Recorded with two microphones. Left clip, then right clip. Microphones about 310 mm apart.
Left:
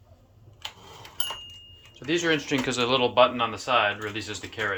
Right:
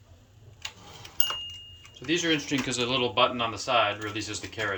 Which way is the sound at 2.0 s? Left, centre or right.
Centre.